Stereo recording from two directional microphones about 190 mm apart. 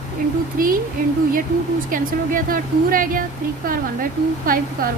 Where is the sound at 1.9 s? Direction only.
45° right (ahead or behind).